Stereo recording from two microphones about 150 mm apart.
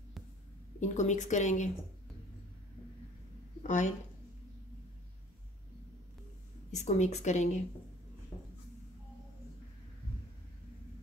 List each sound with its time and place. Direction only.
0.7 s a woman's voice: 50° left (ahead or behind)
3.6 s speech: 55° left (ahead or behind)
6.7 s a woman's voice: 50° left (ahead or behind)